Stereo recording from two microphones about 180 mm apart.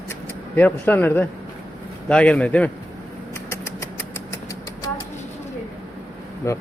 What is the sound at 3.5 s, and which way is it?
Vehicle, 15° left (ahead or behind).